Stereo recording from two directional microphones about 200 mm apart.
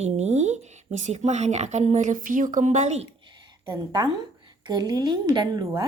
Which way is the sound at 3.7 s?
20° right (ahead or behind).